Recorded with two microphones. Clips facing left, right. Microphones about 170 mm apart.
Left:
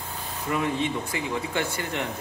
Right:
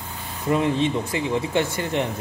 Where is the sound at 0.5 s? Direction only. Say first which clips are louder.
Right 6 dB; 20° right (ahead or behind).